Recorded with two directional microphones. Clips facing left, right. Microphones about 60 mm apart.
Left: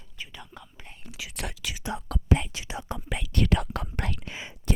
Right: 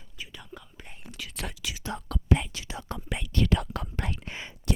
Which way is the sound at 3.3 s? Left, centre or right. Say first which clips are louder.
Left 1 dB; left.